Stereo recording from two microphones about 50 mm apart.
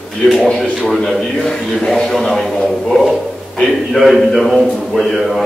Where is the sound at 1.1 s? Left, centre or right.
Centre.